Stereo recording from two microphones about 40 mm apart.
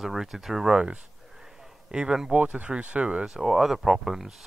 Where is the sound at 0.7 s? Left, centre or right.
Right.